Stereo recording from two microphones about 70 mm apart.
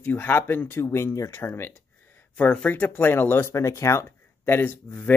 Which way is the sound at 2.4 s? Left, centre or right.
Left.